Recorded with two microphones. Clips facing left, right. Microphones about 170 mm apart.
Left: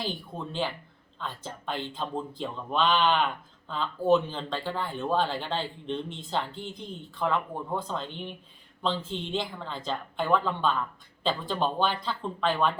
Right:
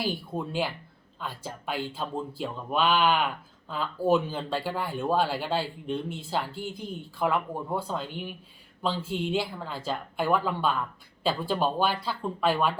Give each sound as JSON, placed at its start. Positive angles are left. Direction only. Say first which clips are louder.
{"t": 0.0, "sound": "speech", "louder": "right 4 dB", "side_deg": -10}